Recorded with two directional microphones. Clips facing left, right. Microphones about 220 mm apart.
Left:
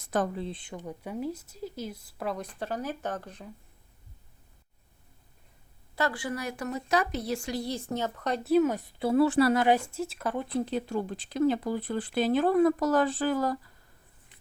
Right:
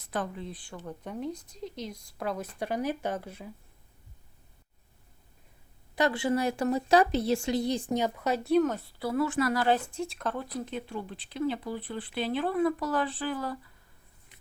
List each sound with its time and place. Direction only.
0.0 s speech: 45° left (ahead or behind)
0.4 s speech: 25° left (ahead or behind); by 2.5 s centre (ahead or behind)
2.6 s speech: 10° right (ahead or behind)
6.0 s speech: 25° right (ahead or behind); by 9.6 s 30° left (ahead or behind)
9.6 s speech: 10° left (ahead or behind)
10.7 s speech: 40° left (ahead or behind)